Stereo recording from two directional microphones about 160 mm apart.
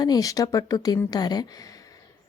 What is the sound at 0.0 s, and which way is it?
Speech, 25° left (ahead or behind).